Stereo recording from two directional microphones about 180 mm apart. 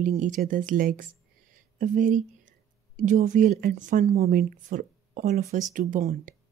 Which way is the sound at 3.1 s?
45° right (ahead or behind).